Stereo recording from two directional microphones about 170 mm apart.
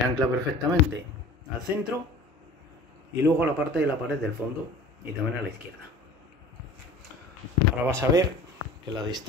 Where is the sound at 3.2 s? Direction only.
10° right (ahead or behind).